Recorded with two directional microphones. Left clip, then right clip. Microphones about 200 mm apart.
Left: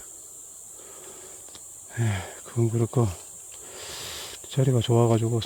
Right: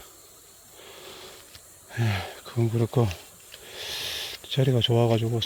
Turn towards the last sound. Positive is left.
turn(degrees=35)  # may be behind; listen again after turning